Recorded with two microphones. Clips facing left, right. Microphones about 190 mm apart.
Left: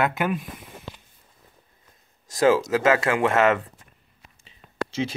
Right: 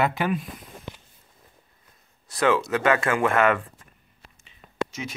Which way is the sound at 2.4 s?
35° left (ahead or behind).